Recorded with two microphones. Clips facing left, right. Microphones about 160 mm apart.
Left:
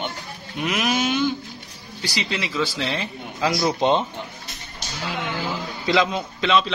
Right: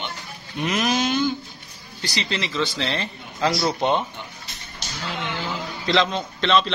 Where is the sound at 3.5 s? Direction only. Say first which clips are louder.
Left 2 dB; 15° left (ahead or behind).